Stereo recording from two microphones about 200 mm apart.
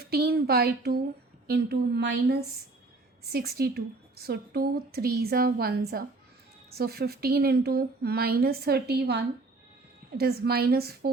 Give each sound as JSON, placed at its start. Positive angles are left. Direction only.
{"t": 0.1, "sound": "a woman's voice", "side_deg": -50}